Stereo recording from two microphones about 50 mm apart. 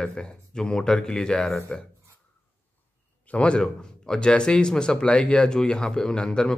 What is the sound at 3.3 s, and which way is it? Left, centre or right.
Speech, left.